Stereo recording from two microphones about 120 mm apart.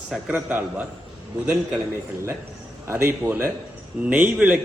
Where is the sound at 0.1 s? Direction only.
10° right (ahead or behind).